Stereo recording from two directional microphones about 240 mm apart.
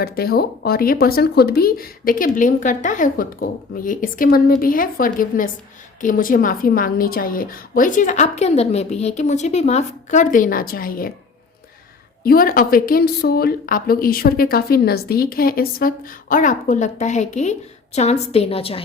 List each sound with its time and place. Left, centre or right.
0.0 s a woman's voice: left
12.2 s a woman's voice: left